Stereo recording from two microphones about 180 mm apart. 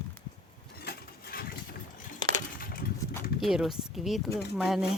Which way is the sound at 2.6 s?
55° left (ahead or behind).